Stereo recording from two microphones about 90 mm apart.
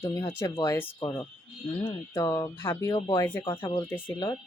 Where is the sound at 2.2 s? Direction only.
40° left (ahead or behind).